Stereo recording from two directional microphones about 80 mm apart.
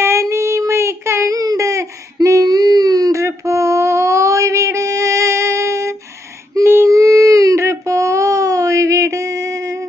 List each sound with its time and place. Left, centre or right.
0.0 s child singing: right
1.4 s a sound: right
6.5 s child singing: right